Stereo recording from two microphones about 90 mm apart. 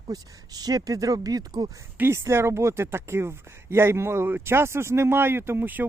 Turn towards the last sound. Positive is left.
turn(degrees=-20)  # may be behind; listen again after turning